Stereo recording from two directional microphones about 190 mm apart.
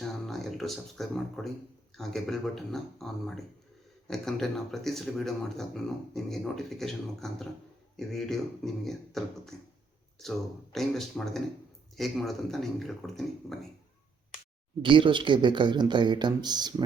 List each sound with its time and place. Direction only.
0.0 s a sound: centre (ahead or behind)
2.0 s speech: centre (ahead or behind)
14.8 s speech: 25° right (ahead or behind)